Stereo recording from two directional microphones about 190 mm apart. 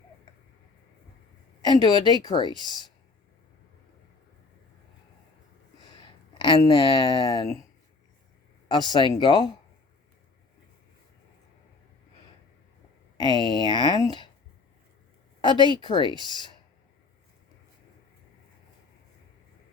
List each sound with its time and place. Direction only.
1.6 s speech: 20° left (ahead or behind)
6.0 s speech: 25° left (ahead or behind)
8.6 s speech: 25° left (ahead or behind)
13.1 s speech: 25° left (ahead or behind)
15.4 s speech: 25° left (ahead or behind)